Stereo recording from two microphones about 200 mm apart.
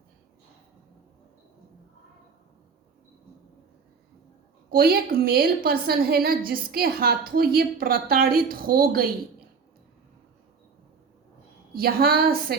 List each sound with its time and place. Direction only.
4.7 s a woman's voice: 50° right (ahead or behind)
11.7 s a woman's voice: 50° right (ahead or behind)